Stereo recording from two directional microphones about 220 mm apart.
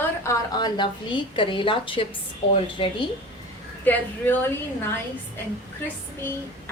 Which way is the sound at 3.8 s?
10° left (ahead or behind).